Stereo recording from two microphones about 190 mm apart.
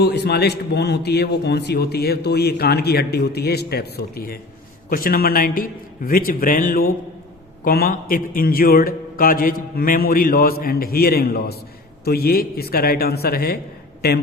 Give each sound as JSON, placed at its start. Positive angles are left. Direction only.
{"t": 0.0, "sound": "a man's voice", "side_deg": 60}